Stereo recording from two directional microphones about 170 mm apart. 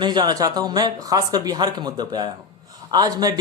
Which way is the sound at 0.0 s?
25° right (ahead or behind).